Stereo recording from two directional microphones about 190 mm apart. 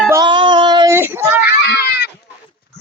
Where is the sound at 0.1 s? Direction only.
25° right (ahead or behind).